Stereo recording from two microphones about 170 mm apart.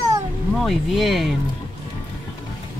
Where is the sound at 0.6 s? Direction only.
Centre (ahead or behind).